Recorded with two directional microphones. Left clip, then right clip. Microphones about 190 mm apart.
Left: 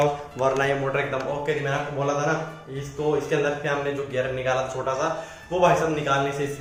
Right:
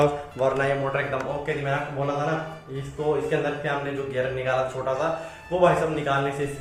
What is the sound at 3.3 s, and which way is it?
Speech, 10° left (ahead or behind).